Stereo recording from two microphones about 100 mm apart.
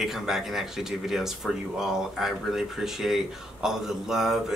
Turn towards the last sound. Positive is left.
turn(degrees=-5)  # may be behind; listen again after turning